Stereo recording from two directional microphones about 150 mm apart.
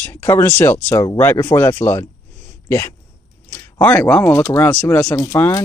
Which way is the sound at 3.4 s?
20° left (ahead or behind).